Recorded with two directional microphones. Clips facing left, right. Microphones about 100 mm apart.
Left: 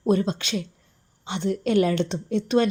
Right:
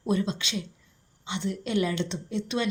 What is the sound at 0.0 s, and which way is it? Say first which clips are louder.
A woman's voice: left 5 dB; 50° left (ahead or behind).